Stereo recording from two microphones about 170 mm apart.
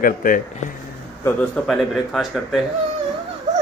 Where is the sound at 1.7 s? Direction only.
Centre (ahead or behind).